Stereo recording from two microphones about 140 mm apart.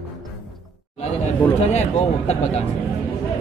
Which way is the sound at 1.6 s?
50° left (ahead or behind).